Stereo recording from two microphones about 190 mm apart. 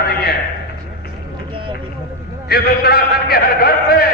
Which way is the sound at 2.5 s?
55° left (ahead or behind).